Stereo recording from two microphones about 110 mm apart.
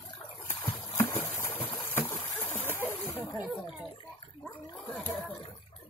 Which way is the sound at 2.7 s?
20° left (ahead or behind).